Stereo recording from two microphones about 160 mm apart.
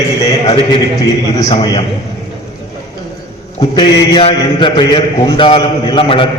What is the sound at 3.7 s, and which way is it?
A man's voice, 30° left (ahead or behind).